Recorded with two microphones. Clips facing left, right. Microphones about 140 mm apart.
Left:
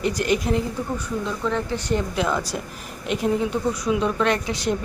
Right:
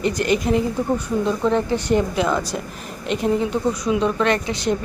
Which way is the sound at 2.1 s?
Centre (ahead or behind).